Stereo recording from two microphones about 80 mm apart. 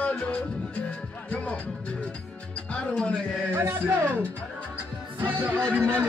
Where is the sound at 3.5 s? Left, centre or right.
Right.